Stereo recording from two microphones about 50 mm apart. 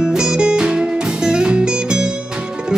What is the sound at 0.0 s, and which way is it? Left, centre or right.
Music, centre.